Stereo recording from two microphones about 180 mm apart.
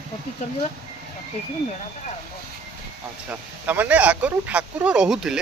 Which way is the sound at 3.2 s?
10° right (ahead or behind).